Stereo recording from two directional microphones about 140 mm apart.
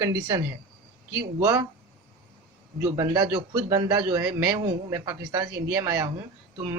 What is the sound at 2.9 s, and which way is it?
A man's voice, 30° right (ahead or behind).